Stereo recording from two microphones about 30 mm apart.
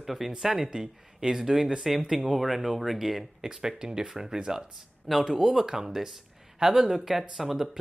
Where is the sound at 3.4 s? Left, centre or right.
Centre.